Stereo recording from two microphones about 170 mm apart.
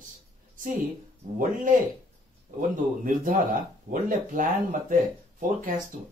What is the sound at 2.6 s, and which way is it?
Speech, 55° right (ahead or behind).